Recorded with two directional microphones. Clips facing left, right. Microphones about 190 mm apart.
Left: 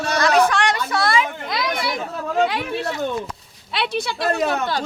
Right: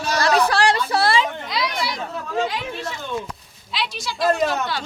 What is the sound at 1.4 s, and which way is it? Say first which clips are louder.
Children playing: left 1 dB; 50° left (ahead or behind).